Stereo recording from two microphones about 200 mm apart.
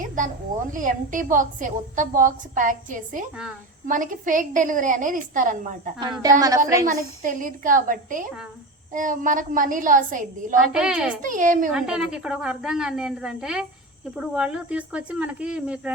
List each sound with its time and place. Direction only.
0.2 s cricket: 40° right (ahead or behind)
0.7 s a woman's voice: 40° right (ahead or behind)
6.0 s a woman's voice: 20° right (ahead or behind)
6.8 s a woman's voice: 40° right (ahead or behind)
10.7 s speech: 5° right (ahead or behind)
11.2 s a woman's voice: 40° right (ahead or behind)
11.7 s speech: 5° right (ahead or behind)